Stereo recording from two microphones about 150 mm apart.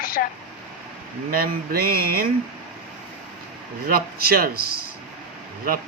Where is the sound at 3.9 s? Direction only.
90° right.